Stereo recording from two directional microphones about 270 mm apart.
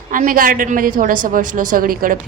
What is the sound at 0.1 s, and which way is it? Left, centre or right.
A woman's voice, right.